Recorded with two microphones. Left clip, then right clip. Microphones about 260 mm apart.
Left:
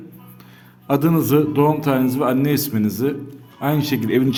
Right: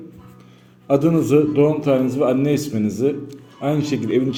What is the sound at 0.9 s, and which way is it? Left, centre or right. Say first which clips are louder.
Speech: right 2 dB; left.